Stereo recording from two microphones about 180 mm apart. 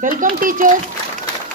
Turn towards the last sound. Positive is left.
turn(degrees=-50)  # may be behind; listen again after turning